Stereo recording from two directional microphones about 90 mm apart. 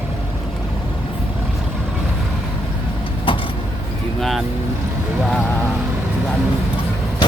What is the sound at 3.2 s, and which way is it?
Vehicle, 70° left (ahead or behind).